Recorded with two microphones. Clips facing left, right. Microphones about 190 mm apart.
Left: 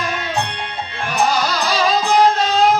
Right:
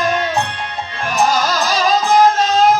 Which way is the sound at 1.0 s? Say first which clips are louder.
Right 2 dB; 45° right (ahead or behind).